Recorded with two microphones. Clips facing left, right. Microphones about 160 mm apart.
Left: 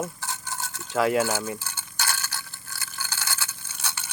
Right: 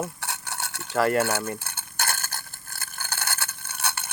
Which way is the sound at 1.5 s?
55° right (ahead or behind).